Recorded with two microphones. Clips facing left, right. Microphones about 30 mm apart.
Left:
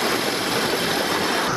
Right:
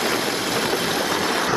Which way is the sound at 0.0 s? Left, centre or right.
Left.